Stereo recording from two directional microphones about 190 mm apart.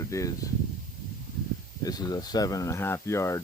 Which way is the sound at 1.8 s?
20° left (ahead or behind).